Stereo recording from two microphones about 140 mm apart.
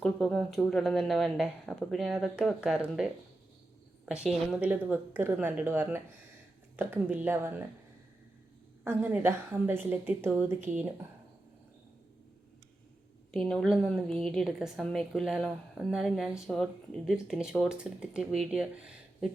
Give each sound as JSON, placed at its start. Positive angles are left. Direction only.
{"t": 0.0, "sound": "a woman's voice", "side_deg": 5}
{"t": 8.8, "sound": "a woman's voice", "side_deg": -15}
{"t": 13.3, "sound": "a woman's voice", "side_deg": 0}